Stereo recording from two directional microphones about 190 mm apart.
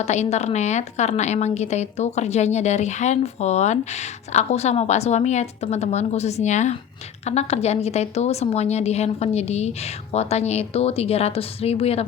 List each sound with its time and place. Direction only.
0.0 s a woman's voice: 35° left (ahead or behind)